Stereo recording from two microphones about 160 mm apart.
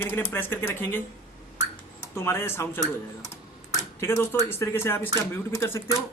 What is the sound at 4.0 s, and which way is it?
Speech, 15° left (ahead or behind).